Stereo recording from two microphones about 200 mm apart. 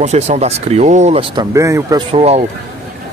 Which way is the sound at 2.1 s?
30° right (ahead or behind).